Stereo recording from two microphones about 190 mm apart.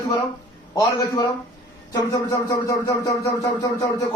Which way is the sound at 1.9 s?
20° left (ahead or behind).